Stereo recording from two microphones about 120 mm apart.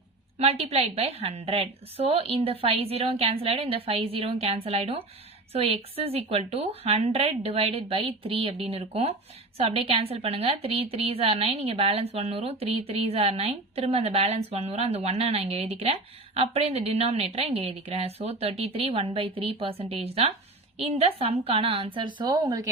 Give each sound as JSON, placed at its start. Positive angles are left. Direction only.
{"t": 0.3, "sound": "a woman's voice", "side_deg": -60}